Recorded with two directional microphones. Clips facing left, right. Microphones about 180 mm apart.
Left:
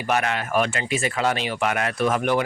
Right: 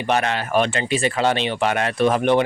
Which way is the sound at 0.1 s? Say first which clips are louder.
Right 3 dB; 30° right (ahead or behind).